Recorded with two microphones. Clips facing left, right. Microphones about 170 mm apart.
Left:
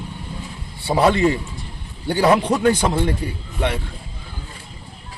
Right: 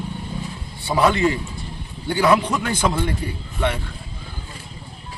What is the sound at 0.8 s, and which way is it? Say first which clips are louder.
A man's voice: left 2 dB; 30° left (ahead or behind).